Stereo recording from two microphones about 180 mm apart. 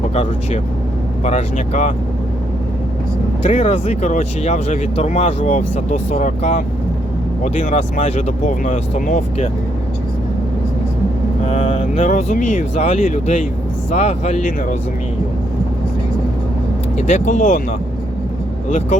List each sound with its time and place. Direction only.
0.1 s speech: 40° left (ahead or behind)
3.4 s speech: 40° left (ahead or behind)
11.4 s speech: 40° left (ahead or behind)
17.0 s speech: 40° left (ahead or behind)